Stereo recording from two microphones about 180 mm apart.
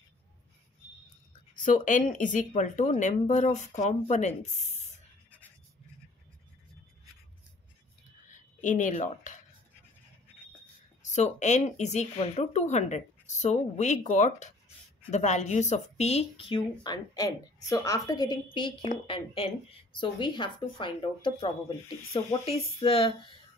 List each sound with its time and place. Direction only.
1.5 s speech: 45° left (ahead or behind)
4.6 s spray: 40° left (ahead or behind)
8.5 s speech: 45° left (ahead or behind)
11.1 s speech: 40° left (ahead or behind)